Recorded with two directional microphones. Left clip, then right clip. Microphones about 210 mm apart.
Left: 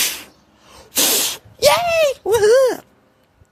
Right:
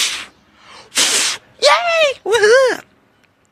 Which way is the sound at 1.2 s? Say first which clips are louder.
Right 2 dB; 25° left (ahead or behind).